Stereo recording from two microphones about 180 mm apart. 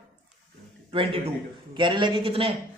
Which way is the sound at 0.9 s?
30° right (ahead or behind).